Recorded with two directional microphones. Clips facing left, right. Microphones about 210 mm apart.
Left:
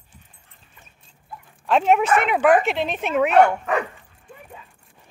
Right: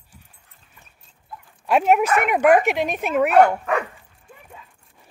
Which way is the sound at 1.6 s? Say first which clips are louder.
Even; 10° right (ahead or behind).